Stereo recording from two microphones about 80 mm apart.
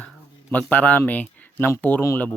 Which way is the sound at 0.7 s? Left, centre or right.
Left.